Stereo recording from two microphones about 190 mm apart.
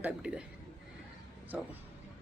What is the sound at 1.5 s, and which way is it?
Speech, 5° right (ahead or behind).